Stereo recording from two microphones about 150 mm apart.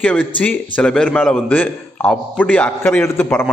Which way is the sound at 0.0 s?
10° left (ahead or behind).